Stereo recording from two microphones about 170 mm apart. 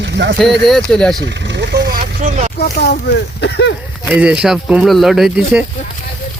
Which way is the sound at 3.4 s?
80° left.